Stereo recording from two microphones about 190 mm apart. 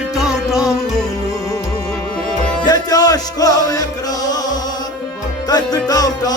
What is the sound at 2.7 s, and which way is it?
Music, 20° left (ahead or behind).